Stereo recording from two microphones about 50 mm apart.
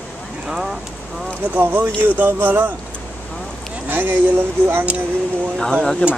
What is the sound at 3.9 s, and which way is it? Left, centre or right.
Speech, right.